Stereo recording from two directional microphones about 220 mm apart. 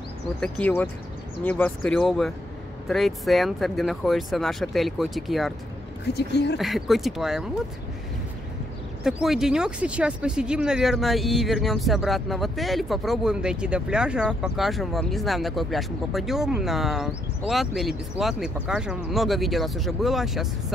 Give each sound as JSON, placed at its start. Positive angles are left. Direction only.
{"t": 0.4, "sound": "speech", "side_deg": 5}
{"t": 6.1, "sound": "speech", "side_deg": 50}
{"t": 6.6, "sound": "speech", "side_deg": 0}
{"t": 9.0, "sound": "speech", "side_deg": 0}